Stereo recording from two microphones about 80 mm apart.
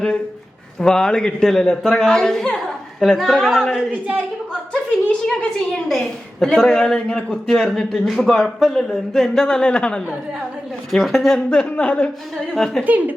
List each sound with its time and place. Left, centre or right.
0.8 s a woman's voice: centre
4.9 s a woman's voice: centre
12.5 s a woman's voice: centre
12.8 s speech: right